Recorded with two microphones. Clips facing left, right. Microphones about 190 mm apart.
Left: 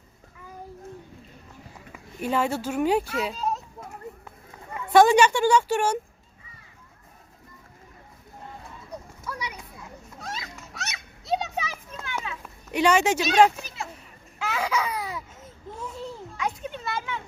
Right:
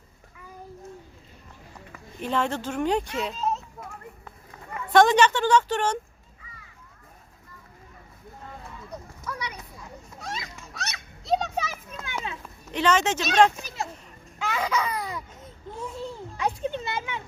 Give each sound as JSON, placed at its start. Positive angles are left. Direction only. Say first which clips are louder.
{"t": 2.2, "sound": "speech", "louder": "left 2 dB", "side_deg": 10}
{"t": 4.9, "sound": "speech", "louder": "left 1 dB", "side_deg": 10}
{"t": 9.2, "sound": "a sound", "louder": "right 1 dB", "side_deg": 10}
{"t": 10.2, "sound": "children playing", "louder": "right 1 dB", "side_deg": 5}
{"t": 12.7, "sound": "speech", "louder": "left 2 dB", "side_deg": 10}
{"t": 14.3, "sound": "a sound", "louder": "even", "side_deg": 5}
{"t": 16.4, "sound": "children playing", "louder": "right 4 dB", "side_deg": -30}